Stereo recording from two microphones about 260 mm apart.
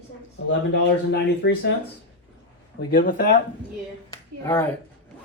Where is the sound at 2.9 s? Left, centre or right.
Left.